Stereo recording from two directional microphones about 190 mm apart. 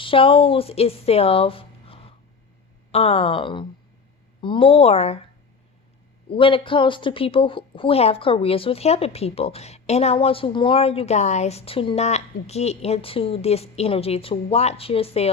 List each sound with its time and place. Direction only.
0.0 s a woman's voice: 30° left (ahead or behind)
6.3 s speech: 25° left (ahead or behind)